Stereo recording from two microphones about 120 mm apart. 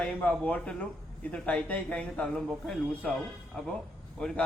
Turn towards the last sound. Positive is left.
turn(degrees=5)  # may be behind; listen again after turning